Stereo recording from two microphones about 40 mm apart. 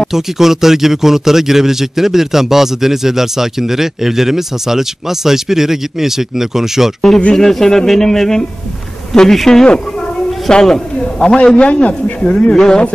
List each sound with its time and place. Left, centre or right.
0.1 s a man's voice: centre
7.3 s a man's voice: centre